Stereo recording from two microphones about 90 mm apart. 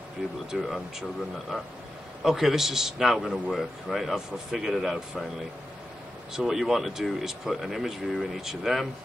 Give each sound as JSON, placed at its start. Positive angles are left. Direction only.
{"t": 0.5, "sound": "a man's voice", "side_deg": 0}
{"t": 6.3, "sound": "a man's voice", "side_deg": -5}